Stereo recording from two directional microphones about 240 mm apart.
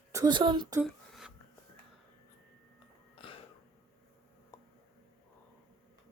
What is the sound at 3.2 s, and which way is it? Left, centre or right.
Throat clearing, left.